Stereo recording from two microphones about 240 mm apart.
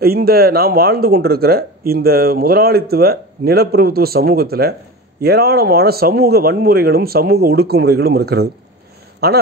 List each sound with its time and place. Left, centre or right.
0.0 s speech: right